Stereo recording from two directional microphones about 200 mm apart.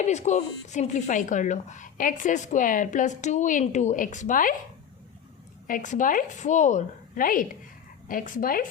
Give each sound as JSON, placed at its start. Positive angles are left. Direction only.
{"t": 0.0, "sound": "speech", "side_deg": 35}
{"t": 5.6, "sound": "a woman's voice", "side_deg": 40}